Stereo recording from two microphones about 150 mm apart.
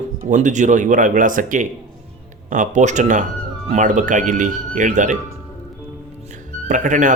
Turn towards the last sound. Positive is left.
turn(degrees=-60)  # may be behind; listen again after turning